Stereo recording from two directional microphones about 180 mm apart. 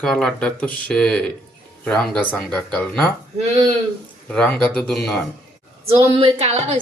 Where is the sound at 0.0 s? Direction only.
5° left (ahead or behind).